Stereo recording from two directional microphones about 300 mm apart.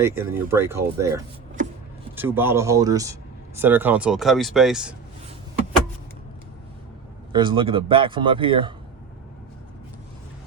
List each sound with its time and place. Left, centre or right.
0.0 s speech: centre
7.3 s speech: centre